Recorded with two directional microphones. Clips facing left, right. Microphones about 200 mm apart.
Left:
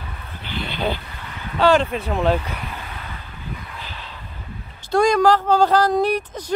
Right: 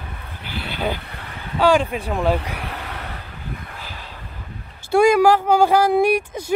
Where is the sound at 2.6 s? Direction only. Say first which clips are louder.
Right 2 dB; 70° right (ahead or behind).